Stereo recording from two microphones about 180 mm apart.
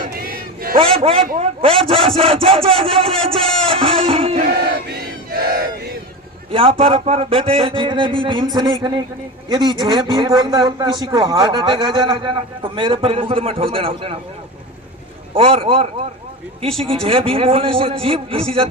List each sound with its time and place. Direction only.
0.9 s a man's voice: 30° right (ahead or behind)
3.3 s speech: 5° left (ahead or behind)
3.7 s music: 30° right (ahead or behind)
5.3 s battle cry: 55° right (ahead or behind)
6.5 s a man's voice: 30° right (ahead or behind)
15.4 s a man's voice: 30° right (ahead or behind)